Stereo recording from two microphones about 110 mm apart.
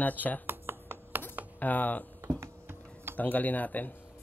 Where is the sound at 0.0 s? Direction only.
15° left (ahead or behind).